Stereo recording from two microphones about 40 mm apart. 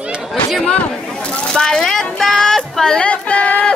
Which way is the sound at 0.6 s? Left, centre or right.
Left.